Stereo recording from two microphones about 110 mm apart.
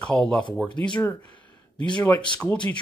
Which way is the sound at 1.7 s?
45° left (ahead or behind).